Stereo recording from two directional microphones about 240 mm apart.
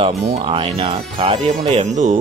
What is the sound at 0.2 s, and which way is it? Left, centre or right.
Speech, right.